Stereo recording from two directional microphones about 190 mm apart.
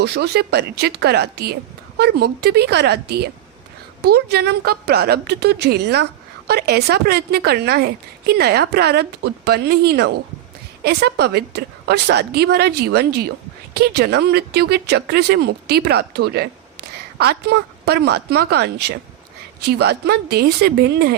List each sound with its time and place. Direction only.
0.0 s a woman's voice: 60° right (ahead or behind)